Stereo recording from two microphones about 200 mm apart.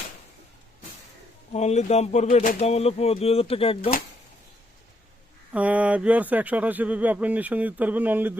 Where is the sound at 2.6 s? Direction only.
30° left (ahead or behind).